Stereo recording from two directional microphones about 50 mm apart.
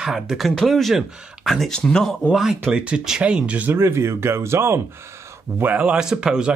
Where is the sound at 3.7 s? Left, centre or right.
Right.